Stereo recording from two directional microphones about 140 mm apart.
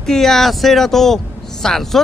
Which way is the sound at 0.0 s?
Centre (ahead or behind).